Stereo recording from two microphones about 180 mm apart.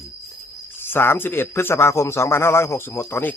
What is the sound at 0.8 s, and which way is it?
Speech, 10° left (ahead or behind).